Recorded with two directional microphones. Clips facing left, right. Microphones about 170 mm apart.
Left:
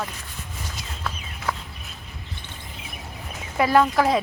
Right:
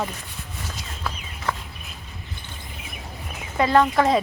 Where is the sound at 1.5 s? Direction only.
5° left (ahead or behind).